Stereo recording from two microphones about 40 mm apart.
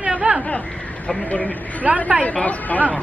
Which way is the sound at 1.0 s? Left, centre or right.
Left.